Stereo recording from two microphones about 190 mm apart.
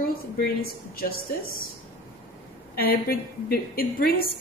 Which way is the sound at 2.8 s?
50° left (ahead or behind).